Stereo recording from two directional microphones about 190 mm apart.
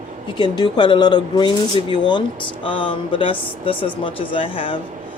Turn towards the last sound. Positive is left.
turn(degrees=25)  # may be behind; listen again after turning